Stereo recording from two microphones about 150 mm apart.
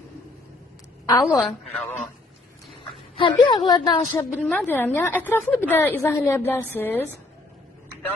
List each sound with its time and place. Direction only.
1.0 s a woman's voice: 20° left (ahead or behind)
3.4 s a woman's voice: 30° left (ahead or behind)
4.1 s a woman's voice: 15° left (ahead or behind)